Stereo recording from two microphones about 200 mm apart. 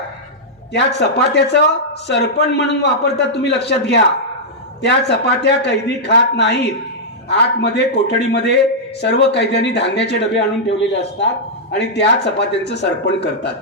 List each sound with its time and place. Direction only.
0.7 s speech: 60° left (ahead or behind)